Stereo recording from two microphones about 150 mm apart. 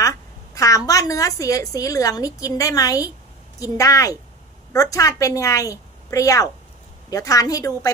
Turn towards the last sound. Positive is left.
turn(degrees=25)  # may be behind; listen again after turning